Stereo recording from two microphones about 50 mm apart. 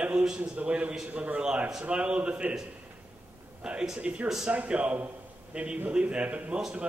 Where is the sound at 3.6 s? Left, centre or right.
Centre.